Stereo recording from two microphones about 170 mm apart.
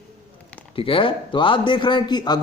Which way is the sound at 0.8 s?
30° left (ahead or behind).